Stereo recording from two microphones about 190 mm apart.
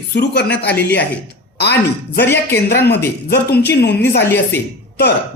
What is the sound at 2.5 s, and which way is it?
Speech, 60° left (ahead or behind).